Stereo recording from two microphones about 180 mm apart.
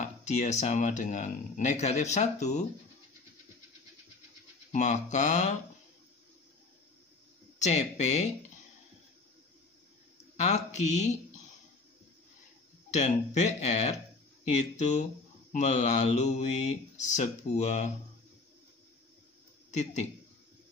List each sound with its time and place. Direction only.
0.3 s speech: 40° left (ahead or behind)
4.7 s speech: 45° left (ahead or behind)
7.5 s speech: 40° left (ahead or behind)
10.3 s speech: 40° left (ahead or behind)
12.9 s speech: 40° left (ahead or behind)
19.7 s speech: 40° left (ahead or behind)